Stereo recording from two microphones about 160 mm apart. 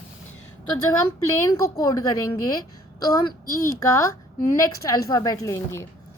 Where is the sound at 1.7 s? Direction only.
25° left (ahead or behind).